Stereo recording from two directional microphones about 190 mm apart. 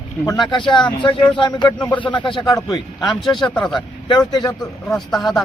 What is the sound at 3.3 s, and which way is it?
Speech, 5° left (ahead or behind).